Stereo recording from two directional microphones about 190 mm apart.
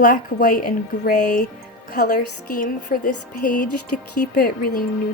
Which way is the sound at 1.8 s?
55° left (ahead or behind).